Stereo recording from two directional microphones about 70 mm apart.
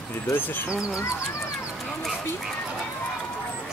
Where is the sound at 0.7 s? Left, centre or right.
Centre.